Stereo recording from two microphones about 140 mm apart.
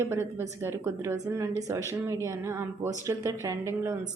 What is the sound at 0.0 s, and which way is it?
Speech, 15° right (ahead or behind).